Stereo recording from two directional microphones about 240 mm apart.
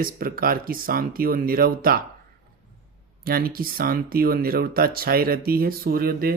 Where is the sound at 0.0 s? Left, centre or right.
Right.